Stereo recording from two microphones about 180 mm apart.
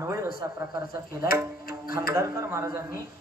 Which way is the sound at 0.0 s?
15° right (ahead or behind).